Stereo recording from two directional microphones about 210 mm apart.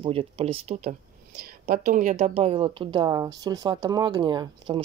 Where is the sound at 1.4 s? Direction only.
45° right (ahead or behind).